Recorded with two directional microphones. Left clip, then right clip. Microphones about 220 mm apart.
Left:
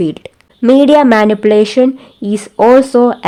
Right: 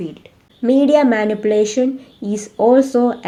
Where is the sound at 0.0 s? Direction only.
50° left (ahead or behind).